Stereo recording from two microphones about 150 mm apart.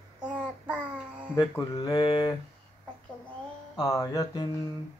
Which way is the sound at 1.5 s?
25° left (ahead or behind).